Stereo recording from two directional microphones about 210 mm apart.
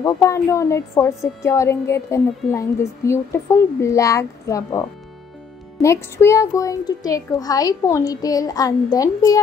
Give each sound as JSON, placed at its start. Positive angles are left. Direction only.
{"t": 0.0, "sound": "a woman's voice", "side_deg": 15}